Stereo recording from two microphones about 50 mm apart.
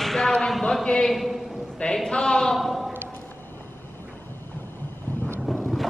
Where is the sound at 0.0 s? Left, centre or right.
Centre.